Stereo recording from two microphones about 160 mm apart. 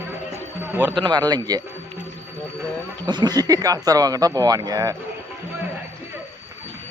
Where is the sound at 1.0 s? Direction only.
25° right (ahead or behind).